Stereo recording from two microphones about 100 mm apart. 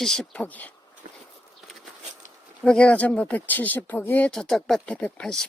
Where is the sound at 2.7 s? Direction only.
10° left (ahead or behind).